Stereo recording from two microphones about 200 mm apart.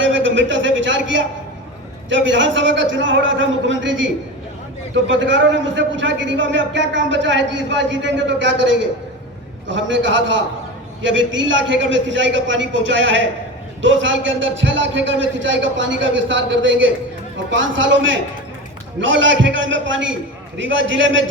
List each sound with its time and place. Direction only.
0.0 s a man's voice: 70° right (ahead or behind)